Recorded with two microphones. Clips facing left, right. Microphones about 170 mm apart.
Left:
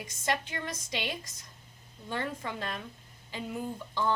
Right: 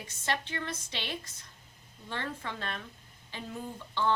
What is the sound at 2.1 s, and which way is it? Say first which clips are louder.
Speech: left 3 dB; 10° left (ahead or behind).